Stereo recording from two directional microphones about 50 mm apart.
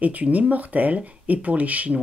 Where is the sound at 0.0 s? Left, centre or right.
Right.